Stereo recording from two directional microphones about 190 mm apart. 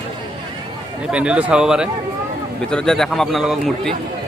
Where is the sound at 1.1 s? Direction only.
5° right (ahead or behind).